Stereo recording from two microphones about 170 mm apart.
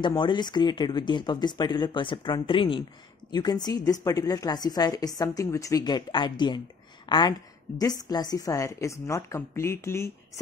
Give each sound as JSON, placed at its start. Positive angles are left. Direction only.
{"t": 0.0, "sound": "a woman's voice", "side_deg": 25}